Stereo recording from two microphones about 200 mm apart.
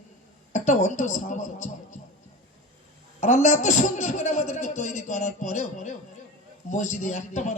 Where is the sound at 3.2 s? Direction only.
35° left (ahead or behind).